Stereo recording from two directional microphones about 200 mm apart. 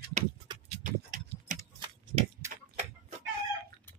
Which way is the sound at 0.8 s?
40° right (ahead or behind).